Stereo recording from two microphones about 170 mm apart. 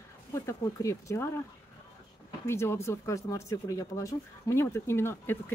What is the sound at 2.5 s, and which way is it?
Speech, 15° left (ahead or behind).